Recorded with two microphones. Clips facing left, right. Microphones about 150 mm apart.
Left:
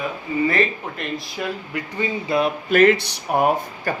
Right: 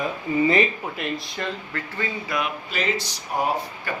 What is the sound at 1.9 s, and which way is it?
Speech, 20° left (ahead or behind).